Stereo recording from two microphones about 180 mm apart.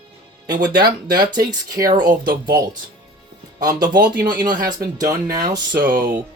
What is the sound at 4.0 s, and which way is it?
Speech, 50° right (ahead or behind).